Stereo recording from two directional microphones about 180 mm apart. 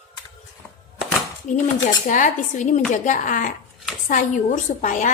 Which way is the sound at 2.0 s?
45° left (ahead or behind).